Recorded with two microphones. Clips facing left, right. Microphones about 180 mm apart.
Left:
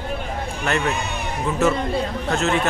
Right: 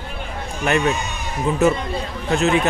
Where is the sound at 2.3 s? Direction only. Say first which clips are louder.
Right 4 dB; 15° right (ahead or behind).